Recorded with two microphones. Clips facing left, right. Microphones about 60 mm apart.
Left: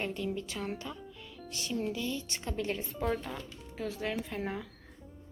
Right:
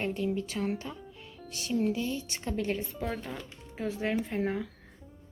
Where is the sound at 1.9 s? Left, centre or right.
Centre.